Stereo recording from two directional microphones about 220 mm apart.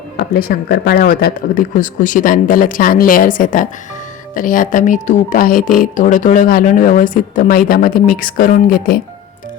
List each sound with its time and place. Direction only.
0.3 s speech: 40° left (ahead or behind)